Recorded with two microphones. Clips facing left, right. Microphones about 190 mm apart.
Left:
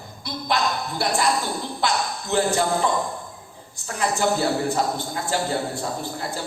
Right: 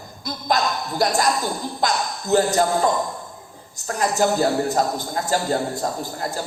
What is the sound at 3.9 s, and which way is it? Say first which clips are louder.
Speech: right 3 dB; 40° right (ahead or behind).